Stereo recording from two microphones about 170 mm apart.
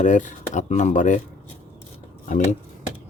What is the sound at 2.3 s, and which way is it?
Speech, 50° left (ahead or behind).